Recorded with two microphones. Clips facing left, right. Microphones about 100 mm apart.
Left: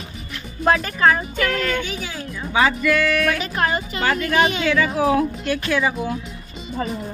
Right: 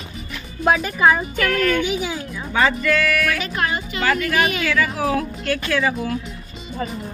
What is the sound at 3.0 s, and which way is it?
A woman's voice, 25° left (ahead or behind).